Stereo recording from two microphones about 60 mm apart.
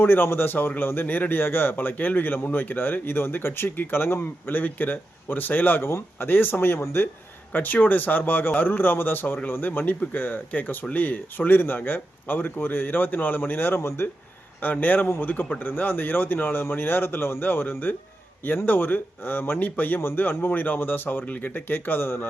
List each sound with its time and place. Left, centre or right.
0.0 s a man's voice: left
14.6 s a man's voice: left